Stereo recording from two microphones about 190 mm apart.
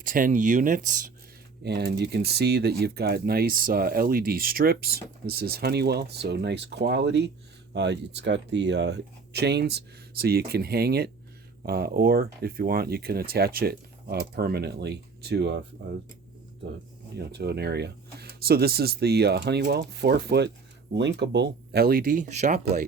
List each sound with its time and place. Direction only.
0.0 s speech: 45° right (ahead or behind)
1.6 s speech: 60° right (ahead or behind)
17.2 s speech: 60° right (ahead or behind); by 22.6 s 40° right (ahead or behind)